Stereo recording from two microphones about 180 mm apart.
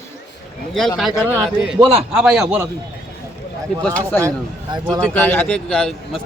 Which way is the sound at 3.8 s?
5° left (ahead or behind).